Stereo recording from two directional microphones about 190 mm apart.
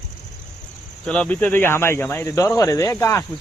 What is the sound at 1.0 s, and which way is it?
Speech, 5° left (ahead or behind).